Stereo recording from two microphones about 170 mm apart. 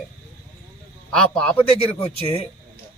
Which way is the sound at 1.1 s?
5° left (ahead or behind).